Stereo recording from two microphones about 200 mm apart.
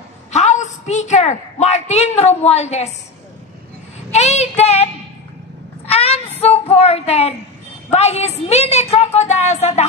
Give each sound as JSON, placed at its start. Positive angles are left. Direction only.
{"t": 0.3, "sound": "a woman's voice", "side_deg": 35}
{"t": 4.1, "sound": "a child's voice", "side_deg": 35}
{"t": 5.9, "sound": "a sound", "side_deg": 30}
{"t": 6.4, "sound": "a woman's voice", "side_deg": 30}